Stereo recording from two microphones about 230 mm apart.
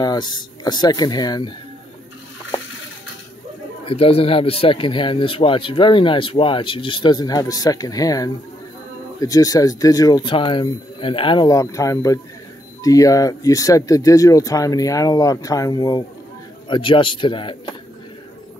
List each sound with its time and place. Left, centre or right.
0.0 s speech: centre
3.8 s speech: left